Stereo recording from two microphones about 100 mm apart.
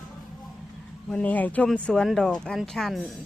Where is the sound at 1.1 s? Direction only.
15° left (ahead or behind).